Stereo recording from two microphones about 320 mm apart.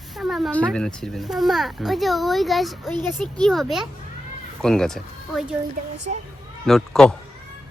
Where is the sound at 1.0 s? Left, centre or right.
Centre.